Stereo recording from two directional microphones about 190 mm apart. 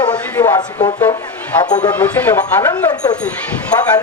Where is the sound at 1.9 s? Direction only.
10° left (ahead or behind).